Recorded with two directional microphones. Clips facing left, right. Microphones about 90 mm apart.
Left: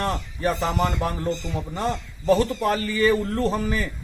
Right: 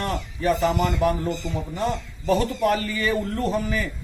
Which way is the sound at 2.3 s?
35° left (ahead or behind).